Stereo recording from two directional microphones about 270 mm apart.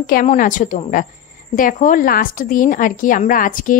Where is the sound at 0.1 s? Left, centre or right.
Left.